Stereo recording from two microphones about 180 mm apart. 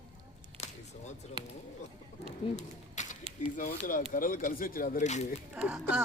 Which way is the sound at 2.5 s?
40° left (ahead or behind).